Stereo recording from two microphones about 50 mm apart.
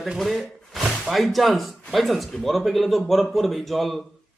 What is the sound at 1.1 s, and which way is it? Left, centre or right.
Speech, centre.